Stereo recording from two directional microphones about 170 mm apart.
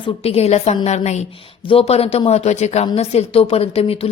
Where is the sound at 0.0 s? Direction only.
35° left (ahead or behind).